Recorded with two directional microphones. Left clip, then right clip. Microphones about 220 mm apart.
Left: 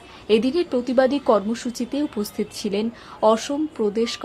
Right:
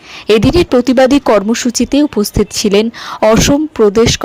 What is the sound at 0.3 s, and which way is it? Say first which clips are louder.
Speech: right 10 dB; 40° right (ahead or behind).